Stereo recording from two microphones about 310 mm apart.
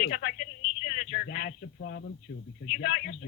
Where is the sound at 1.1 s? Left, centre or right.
Left.